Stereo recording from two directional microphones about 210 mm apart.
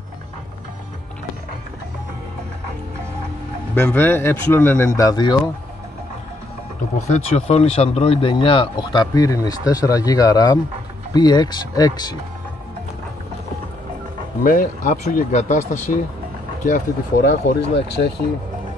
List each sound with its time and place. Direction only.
3.7 s speech: 10° left (ahead or behind)
7.1 s speech: 30° left (ahead or behind)
14.4 s speech: 40° left (ahead or behind)
17.3 s speech: 55° left (ahead or behind)